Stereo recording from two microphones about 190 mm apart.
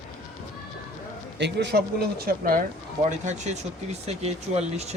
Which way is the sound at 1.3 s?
65° right (ahead or behind).